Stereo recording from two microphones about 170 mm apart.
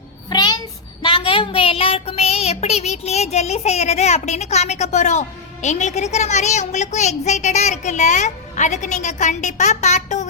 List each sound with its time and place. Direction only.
0.3 s a sound: 25° left (ahead or behind)
1.0 s child singing: 30° left (ahead or behind)
5.6 s a woman's voice: 45° left (ahead or behind)